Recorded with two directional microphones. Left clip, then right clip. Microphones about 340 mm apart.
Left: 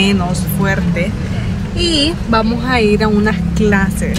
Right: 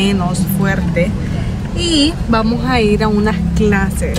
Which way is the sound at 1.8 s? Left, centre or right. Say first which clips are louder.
Even; centre.